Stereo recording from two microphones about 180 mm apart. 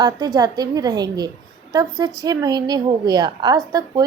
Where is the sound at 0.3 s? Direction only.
20° right (ahead or behind).